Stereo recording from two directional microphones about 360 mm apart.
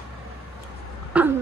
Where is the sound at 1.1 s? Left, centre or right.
Centre.